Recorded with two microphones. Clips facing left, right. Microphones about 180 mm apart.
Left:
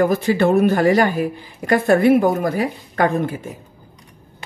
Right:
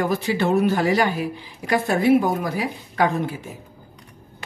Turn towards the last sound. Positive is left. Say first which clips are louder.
# left 3 dB
turn(degrees=50)  # may be behind; listen again after turning